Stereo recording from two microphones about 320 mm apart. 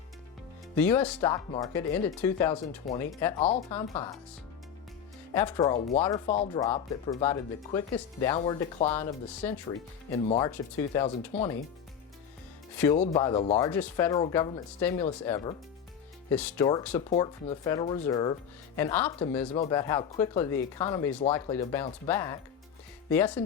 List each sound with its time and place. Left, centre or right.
0.8 s speech: centre
5.3 s speech: centre
12.9 s speech: centre